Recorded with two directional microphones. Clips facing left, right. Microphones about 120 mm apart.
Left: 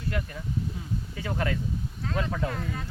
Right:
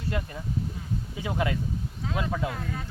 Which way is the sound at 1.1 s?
15° right (ahead or behind).